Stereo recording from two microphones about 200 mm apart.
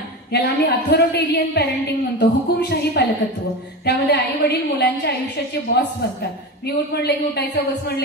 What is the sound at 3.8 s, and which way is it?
A woman's voice, 55° left (ahead or behind).